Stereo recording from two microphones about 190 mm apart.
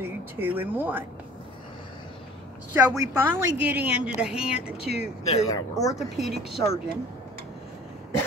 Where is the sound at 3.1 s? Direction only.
10° right (ahead or behind).